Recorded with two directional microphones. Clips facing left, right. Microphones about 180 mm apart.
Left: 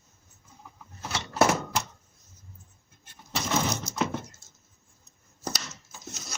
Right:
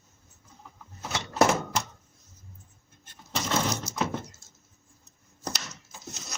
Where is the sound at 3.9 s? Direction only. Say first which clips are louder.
Even; 5° right (ahead or behind).